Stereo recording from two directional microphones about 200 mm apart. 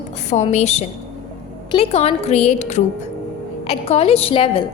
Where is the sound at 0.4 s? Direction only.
35° left (ahead or behind).